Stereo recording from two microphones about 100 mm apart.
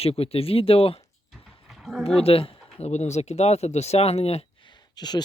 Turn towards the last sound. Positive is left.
turn(degrees=45)  # may be behind; listen again after turning